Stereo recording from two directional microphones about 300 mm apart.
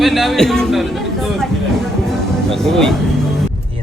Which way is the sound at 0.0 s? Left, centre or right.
Centre.